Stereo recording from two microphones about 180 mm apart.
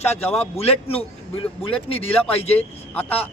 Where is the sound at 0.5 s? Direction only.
35° left (ahead or behind).